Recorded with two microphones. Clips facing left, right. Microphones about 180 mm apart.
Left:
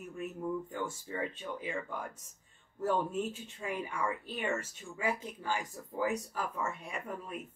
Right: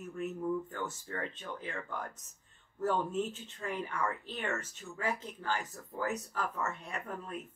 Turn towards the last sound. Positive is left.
turn(degrees=10)  # may be behind; listen again after turning